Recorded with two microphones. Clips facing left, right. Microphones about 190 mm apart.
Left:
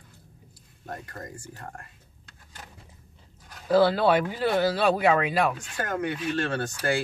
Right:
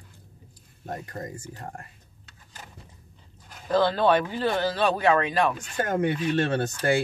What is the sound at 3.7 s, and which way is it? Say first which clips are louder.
Speech: left 1 dB; 10° left (ahead or behind).